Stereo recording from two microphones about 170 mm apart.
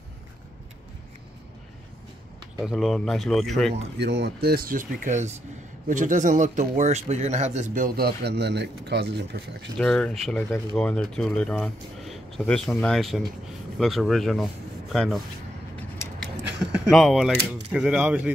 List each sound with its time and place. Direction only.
2.6 s speech: centre (ahead or behind)
4.0 s speech: 75° right (ahead or behind)
9.8 s speech: 5° left (ahead or behind)
16.3 s a sound: 90° right
16.7 s speech: centre (ahead or behind)